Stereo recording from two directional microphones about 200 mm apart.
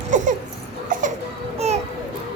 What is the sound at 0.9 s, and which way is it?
Baby cry, 40° right (ahead or behind).